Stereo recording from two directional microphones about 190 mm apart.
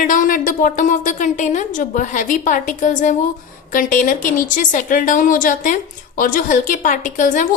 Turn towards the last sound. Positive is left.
turn(degrees=40)  # may be behind; listen again after turning